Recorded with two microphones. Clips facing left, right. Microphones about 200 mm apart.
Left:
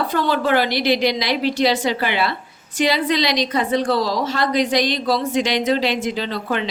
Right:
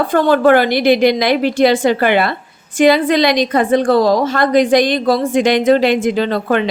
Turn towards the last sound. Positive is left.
turn(degrees=-55)  # may be behind; listen again after turning